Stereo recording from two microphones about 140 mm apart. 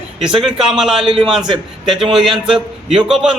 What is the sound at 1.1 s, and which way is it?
Speech, 40° right (ahead or behind).